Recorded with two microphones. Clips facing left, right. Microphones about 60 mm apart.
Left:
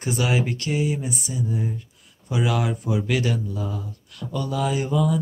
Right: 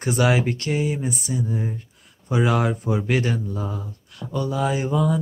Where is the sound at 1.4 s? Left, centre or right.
Right.